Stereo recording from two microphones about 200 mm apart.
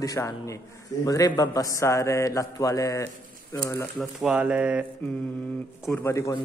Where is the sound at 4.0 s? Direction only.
5° right (ahead or behind).